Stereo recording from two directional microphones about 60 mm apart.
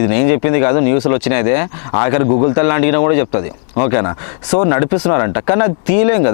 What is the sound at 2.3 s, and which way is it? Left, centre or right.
Speech, left.